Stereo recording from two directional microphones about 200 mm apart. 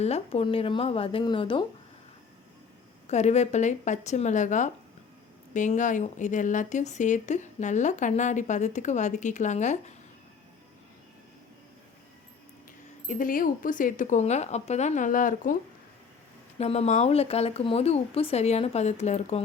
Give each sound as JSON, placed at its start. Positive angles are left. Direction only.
{"t": 0.0, "sound": "speech", "side_deg": 30}
{"t": 3.1, "sound": "speech", "side_deg": 35}
{"t": 13.1, "sound": "speech", "side_deg": 45}
{"t": 16.6, "sound": "speech", "side_deg": 35}